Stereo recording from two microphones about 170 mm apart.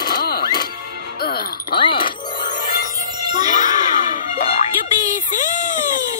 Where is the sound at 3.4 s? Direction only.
45° left (ahead or behind).